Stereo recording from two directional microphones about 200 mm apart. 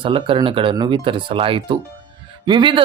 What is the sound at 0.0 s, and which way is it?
Speech, 25° right (ahead or behind).